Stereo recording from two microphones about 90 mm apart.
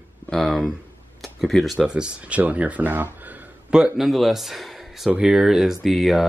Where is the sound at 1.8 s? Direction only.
10° right (ahead or behind).